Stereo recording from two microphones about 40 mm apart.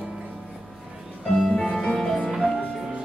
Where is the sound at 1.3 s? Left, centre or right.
Centre.